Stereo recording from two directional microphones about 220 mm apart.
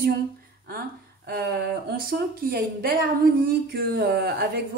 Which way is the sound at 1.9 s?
40° right (ahead or behind).